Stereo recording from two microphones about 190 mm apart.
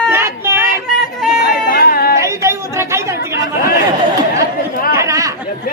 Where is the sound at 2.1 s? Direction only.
15° right (ahead or behind).